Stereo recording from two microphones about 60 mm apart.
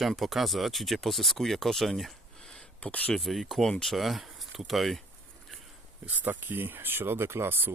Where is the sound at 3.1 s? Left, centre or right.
Centre.